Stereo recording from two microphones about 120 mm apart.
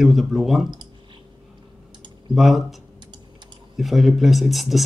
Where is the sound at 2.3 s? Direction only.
Centre (ahead or behind).